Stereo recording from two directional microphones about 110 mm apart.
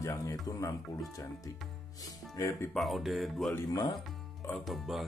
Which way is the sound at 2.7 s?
Centre (ahead or behind).